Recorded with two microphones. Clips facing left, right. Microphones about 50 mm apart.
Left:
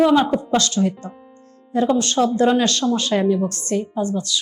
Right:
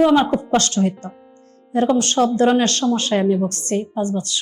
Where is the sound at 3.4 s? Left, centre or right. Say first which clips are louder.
Even; right.